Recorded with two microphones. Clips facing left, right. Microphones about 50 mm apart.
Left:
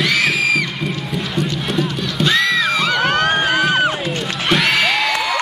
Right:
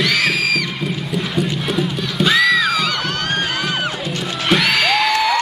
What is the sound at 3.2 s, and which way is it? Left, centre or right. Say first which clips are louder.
Music: left 5 dB; centre.